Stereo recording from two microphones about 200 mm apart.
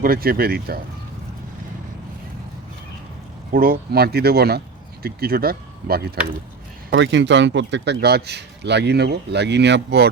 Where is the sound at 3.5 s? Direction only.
45° right (ahead or behind).